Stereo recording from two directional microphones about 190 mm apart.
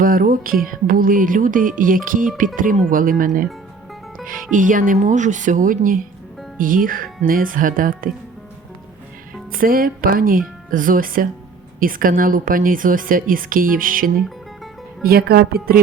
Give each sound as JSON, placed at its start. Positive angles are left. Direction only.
{"t": 0.0, "sound": "speech", "side_deg": -50}
{"t": 4.5, "sound": "speech", "side_deg": -45}
{"t": 9.5, "sound": "speech", "side_deg": -50}
{"t": 14.2, "sound": "music", "side_deg": 0}
{"t": 15.0, "sound": "speech", "side_deg": -55}